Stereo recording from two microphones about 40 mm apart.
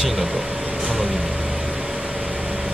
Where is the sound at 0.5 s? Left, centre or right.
Right.